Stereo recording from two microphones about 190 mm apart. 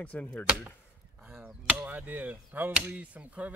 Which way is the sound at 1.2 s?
5° right (ahead or behind).